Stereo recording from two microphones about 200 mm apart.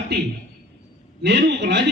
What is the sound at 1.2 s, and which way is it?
Speech, 60° right (ahead or behind).